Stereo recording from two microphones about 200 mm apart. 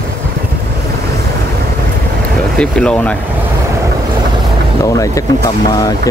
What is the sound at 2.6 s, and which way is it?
Speech, 5° left (ahead or behind).